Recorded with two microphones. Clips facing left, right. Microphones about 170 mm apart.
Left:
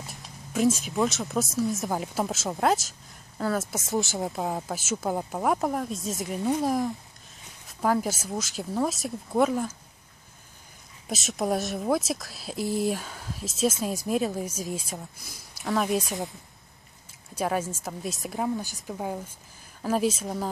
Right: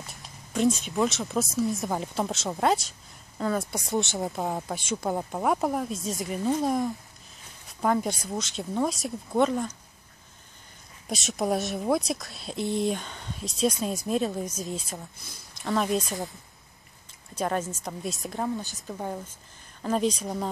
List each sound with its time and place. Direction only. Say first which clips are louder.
0.0 s speech: left 2 dB; centre (ahead or behind)
11.1 s speech: even; centre (ahead or behind)
17.4 s speech: left 1 dB; 5° left (ahead or behind)